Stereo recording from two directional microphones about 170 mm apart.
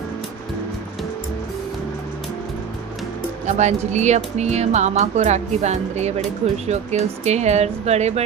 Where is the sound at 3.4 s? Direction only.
45° right (ahead or behind).